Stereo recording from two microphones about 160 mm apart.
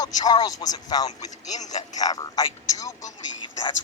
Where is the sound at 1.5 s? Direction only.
50° left (ahead or behind).